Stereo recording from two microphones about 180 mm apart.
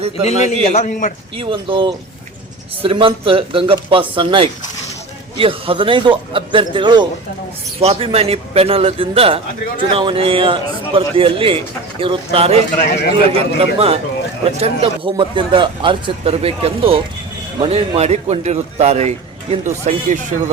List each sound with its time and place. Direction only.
0.3 s a man's voice: 40° left (ahead or behind)
1.4 s a man's voice: 30° right (ahead or behind)